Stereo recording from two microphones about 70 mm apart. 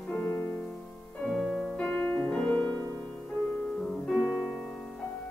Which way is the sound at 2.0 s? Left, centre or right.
Left.